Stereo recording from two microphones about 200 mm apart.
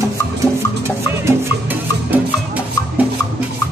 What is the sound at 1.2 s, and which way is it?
Music, 10° right (ahead or behind).